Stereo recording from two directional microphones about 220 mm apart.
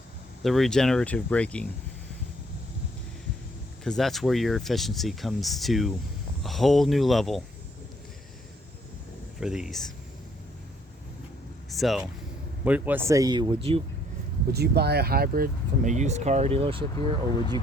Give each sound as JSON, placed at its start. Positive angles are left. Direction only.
{"t": 0.4, "sound": "speech", "side_deg": 0}
{"t": 3.8, "sound": "speech", "side_deg": 0}
{"t": 9.4, "sound": "speech", "side_deg": -5}
{"t": 11.7, "sound": "speech", "side_deg": 0}
{"t": 14.5, "sound": "speech", "side_deg": -45}